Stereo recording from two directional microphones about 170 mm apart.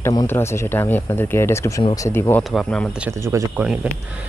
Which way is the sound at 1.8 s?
30° left (ahead or behind).